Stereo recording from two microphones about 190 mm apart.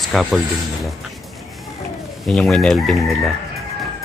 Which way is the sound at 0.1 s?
Centre (ahead or behind).